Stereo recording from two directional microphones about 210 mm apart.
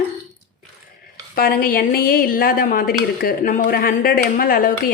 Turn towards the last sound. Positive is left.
turn(degrees=45)  # may be behind; listen again after turning